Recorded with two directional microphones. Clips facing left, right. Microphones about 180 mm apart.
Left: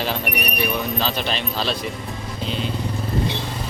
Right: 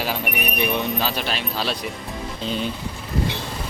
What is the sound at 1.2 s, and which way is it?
Speech, 5° right (ahead or behind).